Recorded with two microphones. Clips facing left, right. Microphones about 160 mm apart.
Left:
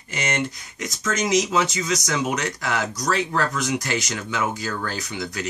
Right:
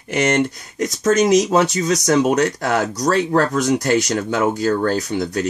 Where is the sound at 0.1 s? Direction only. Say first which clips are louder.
Right 9 dB; 60° right (ahead or behind).